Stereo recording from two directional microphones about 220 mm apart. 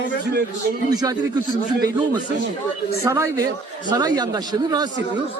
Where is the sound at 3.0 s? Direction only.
15° right (ahead or behind).